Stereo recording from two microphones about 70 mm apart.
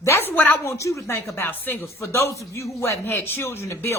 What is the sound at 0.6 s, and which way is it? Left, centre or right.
A woman's voice, left.